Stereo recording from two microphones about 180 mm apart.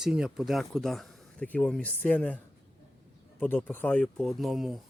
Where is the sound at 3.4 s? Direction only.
10° left (ahead or behind).